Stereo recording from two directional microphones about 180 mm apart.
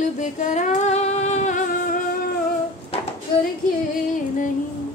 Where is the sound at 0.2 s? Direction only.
45° left (ahead or behind).